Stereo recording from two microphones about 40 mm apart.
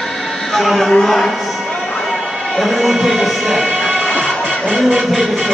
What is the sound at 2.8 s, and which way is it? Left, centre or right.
Music, centre.